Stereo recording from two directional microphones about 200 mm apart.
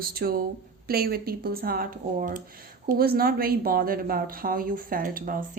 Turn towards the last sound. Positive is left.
turn(degrees=-45)  # may be behind; listen again after turning